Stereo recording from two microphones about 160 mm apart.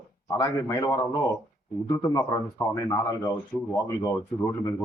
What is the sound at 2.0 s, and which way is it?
A man's voice, 20° left (ahead or behind).